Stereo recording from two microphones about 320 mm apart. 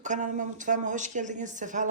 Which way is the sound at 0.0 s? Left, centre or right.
Right.